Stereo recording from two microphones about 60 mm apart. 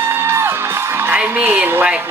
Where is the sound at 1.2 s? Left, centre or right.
Right.